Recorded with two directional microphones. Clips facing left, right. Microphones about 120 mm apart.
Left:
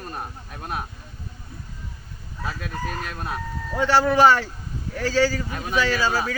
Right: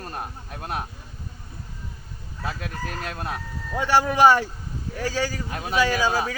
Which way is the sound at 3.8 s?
15° right (ahead or behind).